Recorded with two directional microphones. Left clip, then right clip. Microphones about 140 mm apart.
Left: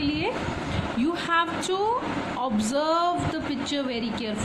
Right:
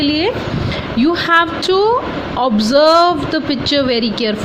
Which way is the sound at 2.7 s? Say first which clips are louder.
Right 14 dB; 40° right (ahead or behind).